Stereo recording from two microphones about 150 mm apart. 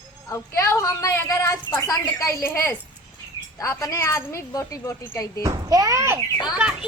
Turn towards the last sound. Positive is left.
turn(degrees=-5)  # may be behind; listen again after turning